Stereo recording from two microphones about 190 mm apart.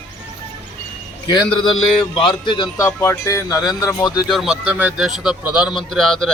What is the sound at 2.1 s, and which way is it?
Speech, 25° left (ahead or behind).